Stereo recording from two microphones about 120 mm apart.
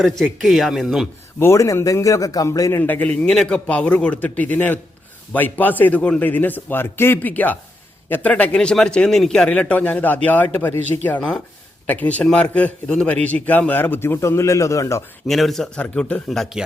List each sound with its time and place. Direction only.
0.0 s a man's voice: centre (ahead or behind)
1.4 s speech: 25° left (ahead or behind)
2.8 s a man's voice: 15° left (ahead or behind)
11.2 s a man's voice: 5° left (ahead or behind); by 15.0 s 25° left (ahead or behind)
15.3 s a man's voice: centre (ahead or behind)